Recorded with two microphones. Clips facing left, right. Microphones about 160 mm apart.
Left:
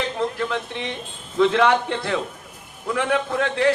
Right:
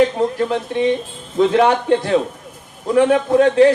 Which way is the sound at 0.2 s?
40° right (ahead or behind).